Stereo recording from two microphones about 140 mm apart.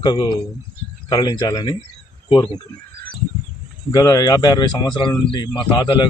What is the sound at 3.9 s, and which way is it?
Speech, 30° left (ahead or behind).